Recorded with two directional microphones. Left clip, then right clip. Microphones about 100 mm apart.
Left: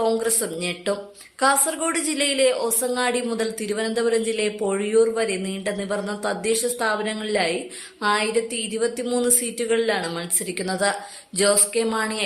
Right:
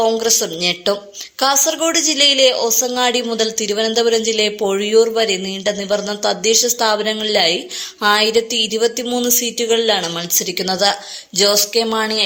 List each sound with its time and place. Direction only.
0.0 s a woman's voice: 30° right (ahead or behind)
2.6 s a woman's voice: 30° right (ahead or behind)